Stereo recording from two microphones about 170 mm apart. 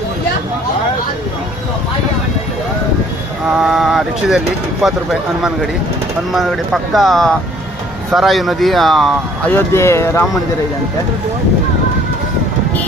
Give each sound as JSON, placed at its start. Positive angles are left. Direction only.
{"t": 3.5, "sound": "speech", "side_deg": 0}
{"t": 6.3, "sound": "speech", "side_deg": 0}
{"t": 9.5, "sound": "speech", "side_deg": 15}